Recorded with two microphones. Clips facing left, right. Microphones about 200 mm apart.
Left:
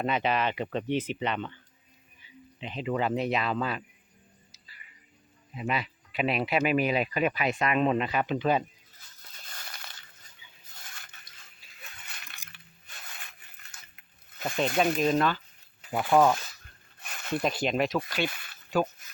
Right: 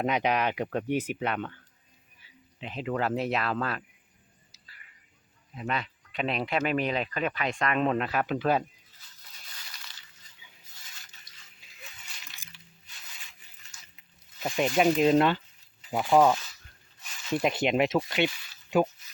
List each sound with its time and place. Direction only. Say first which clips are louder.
0.0 s speech: right 1 dB; 15° right (ahead or behind)
5.5 s speech: left 1 dB; 5° left (ahead or behind)
9.3 s a sound: left 5 dB; 50° left (ahead or behind)
14.8 s speech: right 4 dB; 20° right (ahead or behind)
15.9 s speech: even; centre (ahead or behind)
16.1 s speech: right 1 dB; 15° right (ahead or behind)
17.0 s a sound: left 4 dB; 55° left (ahead or behind)
17.3 s speech: right 2 dB; 20° right (ahead or behind)
18.3 s zipper: left 2 dB; 55° left (ahead or behind)
19.0 s a sound: left 3 dB; 50° left (ahead or behind)